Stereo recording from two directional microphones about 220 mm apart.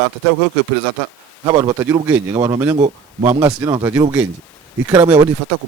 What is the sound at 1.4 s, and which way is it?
Speech, 20° right (ahead or behind).